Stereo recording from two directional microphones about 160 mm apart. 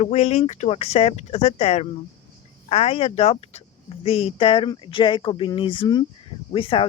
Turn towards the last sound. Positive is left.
turn(degrees=35)  # may be behind; listen again after turning